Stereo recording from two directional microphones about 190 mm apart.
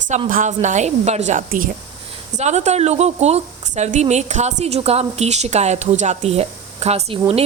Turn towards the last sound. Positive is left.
turn(degrees=-30)  # may be behind; listen again after turning